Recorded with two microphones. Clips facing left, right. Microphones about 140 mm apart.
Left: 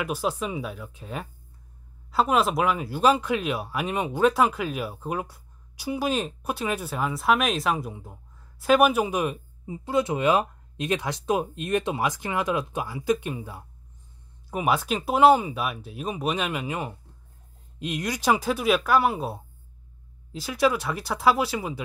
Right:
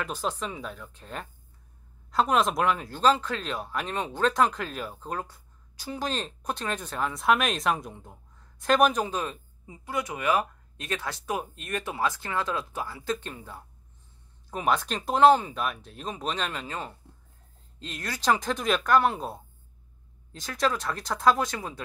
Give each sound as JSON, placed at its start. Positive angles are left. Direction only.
{"t": 0.0, "sound": "speech", "side_deg": 10}
{"t": 9.8, "sound": "speech", "side_deg": 25}